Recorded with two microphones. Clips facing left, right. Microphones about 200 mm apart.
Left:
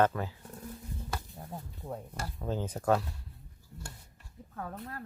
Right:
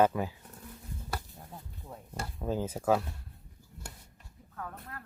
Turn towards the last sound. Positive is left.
turn(degrees=30)  # may be behind; listen again after turning